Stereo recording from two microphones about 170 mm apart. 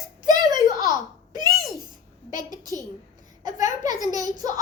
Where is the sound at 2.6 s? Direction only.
20° right (ahead or behind).